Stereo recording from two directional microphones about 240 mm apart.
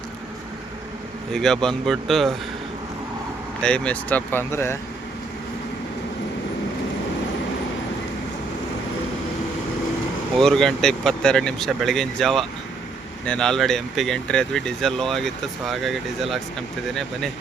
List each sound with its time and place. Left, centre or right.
1.3 s speech: centre
3.6 s speech: centre
10.3 s speech: centre